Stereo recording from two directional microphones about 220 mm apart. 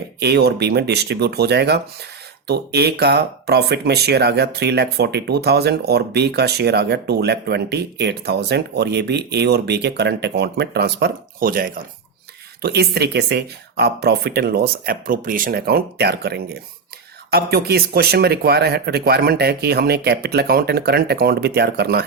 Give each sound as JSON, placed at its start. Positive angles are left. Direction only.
{"t": 0.2, "sound": "speech", "side_deg": -50}